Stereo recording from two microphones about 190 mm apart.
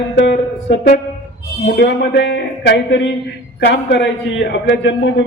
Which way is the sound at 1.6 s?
65° left (ahead or behind).